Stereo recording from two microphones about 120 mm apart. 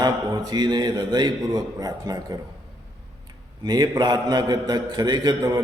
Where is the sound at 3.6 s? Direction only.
35° right (ahead or behind).